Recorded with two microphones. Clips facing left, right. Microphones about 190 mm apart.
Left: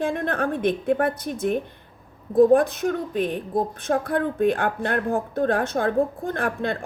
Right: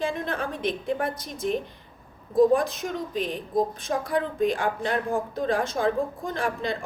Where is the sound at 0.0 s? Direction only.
60° left (ahead or behind).